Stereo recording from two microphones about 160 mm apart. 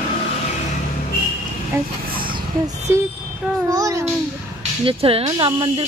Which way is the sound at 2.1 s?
30° right (ahead or behind).